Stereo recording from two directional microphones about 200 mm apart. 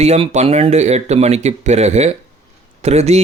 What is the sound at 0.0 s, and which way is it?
Speech, 30° right (ahead or behind).